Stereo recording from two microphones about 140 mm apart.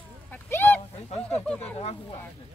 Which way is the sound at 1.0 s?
45° left (ahead or behind).